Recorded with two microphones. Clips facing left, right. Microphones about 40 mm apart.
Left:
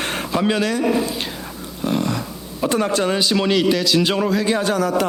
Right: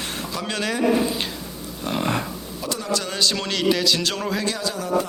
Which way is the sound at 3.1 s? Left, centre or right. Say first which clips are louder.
Left 6 dB; centre.